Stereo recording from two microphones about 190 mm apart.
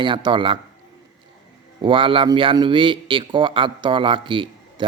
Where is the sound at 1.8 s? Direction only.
25° right (ahead or behind).